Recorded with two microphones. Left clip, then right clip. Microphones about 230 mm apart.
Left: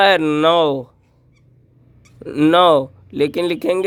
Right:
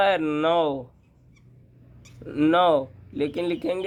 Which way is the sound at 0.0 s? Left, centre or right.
Left.